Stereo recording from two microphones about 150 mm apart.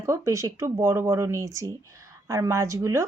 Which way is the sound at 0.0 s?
20° right (ahead or behind).